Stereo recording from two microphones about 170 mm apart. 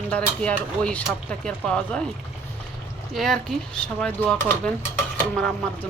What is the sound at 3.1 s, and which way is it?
Speech, centre (ahead or behind).